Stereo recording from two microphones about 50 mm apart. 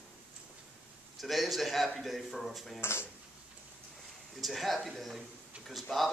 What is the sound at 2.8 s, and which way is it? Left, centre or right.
Speech, left.